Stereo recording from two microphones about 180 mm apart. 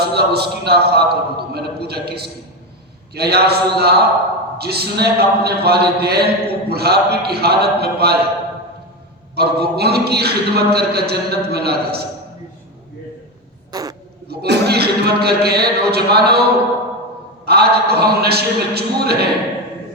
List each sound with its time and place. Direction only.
0.0 s a man's voice: 60° right (ahead or behind)
9.3 s a man's voice: 65° right (ahead or behind)
13.7 s a sound: 20° right (ahead or behind)
14.3 s a man's voice: 65° right (ahead or behind)
17.4 s a man's voice: 65° right (ahead or behind)